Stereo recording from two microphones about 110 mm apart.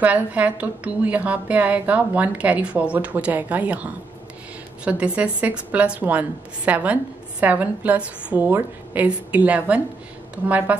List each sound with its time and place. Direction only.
0.0 s a woman's voice: 15° right (ahead or behind)